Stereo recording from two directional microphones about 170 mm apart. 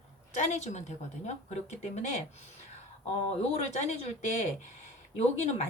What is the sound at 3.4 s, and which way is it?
Speech, 40° left (ahead or behind).